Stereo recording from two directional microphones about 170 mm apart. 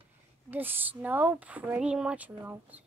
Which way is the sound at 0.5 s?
10° right (ahead or behind).